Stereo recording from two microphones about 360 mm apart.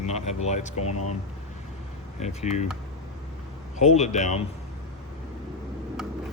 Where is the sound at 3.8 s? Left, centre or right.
Centre.